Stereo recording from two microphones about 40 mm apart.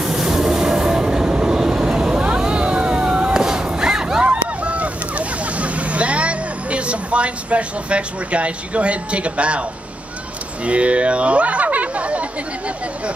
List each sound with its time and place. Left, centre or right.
0.0 s train: centre
1.6 s vehicle: centre
2.2 s a sound: right
10.6 s speech: right